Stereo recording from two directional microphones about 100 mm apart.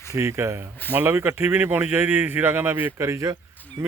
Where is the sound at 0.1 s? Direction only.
30° right (ahead or behind).